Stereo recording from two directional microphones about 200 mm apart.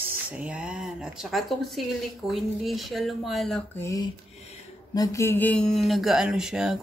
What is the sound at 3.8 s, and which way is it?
Speech, 15° left (ahead or behind).